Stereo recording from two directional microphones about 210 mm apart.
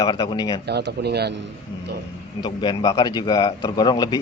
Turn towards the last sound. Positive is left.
turn(degrees=20)  # may be behind; listen again after turning